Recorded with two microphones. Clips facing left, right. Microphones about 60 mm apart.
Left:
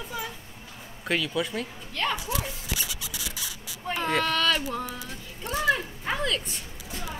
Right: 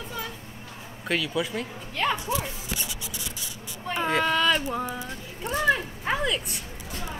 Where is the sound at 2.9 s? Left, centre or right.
Left.